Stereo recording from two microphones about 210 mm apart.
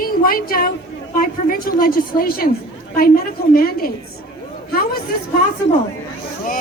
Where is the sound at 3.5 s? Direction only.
45° left (ahead or behind).